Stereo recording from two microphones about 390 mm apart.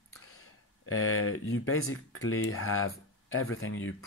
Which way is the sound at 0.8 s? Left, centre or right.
Left.